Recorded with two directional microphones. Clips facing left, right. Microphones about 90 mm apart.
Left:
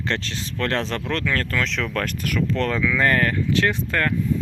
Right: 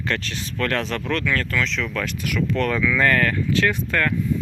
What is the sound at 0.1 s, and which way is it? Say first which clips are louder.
Speech: right 1 dB; 30° left (ahead or behind).